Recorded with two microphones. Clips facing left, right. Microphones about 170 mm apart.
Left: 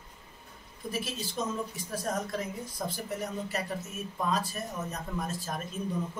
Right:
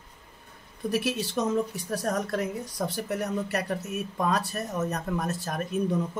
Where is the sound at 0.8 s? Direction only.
70° right (ahead or behind).